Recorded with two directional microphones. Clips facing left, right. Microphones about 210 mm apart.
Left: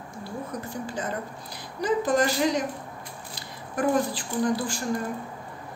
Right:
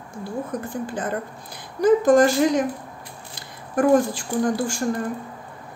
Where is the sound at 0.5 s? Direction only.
50° right (ahead or behind).